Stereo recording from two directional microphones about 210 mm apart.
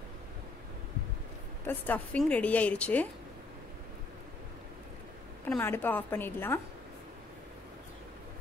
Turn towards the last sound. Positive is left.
turn(degrees=10)  # may be behind; listen again after turning